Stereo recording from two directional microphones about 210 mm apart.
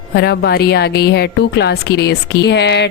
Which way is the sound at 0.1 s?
50° left (ahead or behind).